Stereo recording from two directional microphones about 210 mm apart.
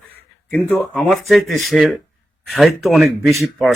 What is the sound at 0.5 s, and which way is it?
Speech, 10° left (ahead or behind).